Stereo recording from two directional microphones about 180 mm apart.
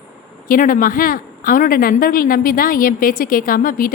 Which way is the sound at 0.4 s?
50° left (ahead or behind).